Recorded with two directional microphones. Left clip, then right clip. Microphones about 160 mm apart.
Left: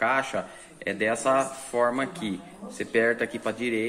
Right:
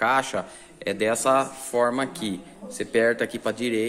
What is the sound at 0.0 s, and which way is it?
A man's voice, 30° right (ahead or behind).